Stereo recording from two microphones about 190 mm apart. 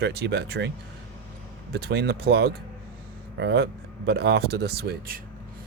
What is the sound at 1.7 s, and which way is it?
Speech, 60° right (ahead or behind).